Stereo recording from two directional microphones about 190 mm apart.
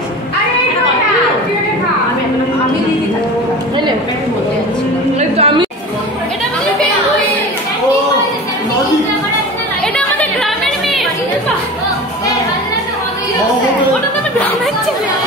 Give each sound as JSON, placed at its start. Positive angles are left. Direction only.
{"t": 5.4, "sound": "music", "side_deg": -25}